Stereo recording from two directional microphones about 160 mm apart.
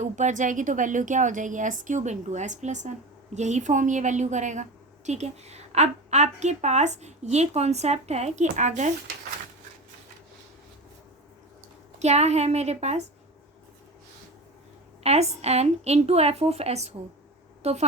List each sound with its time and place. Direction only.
0.0 s a woman's voice: 50° right (ahead or behind)
11.9 s a woman's voice: 45° right (ahead or behind)
15.0 s a woman's voice: 40° right (ahead or behind)